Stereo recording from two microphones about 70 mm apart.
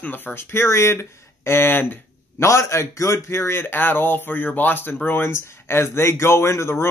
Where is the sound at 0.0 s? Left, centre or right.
Left.